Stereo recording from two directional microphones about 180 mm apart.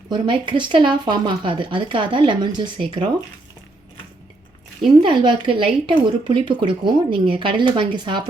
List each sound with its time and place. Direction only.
0.1 s speech: 25° right (ahead or behind)
5.0 s speech: 25° right (ahead or behind)